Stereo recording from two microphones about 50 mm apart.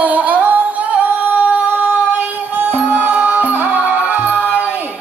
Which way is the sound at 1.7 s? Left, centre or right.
Right.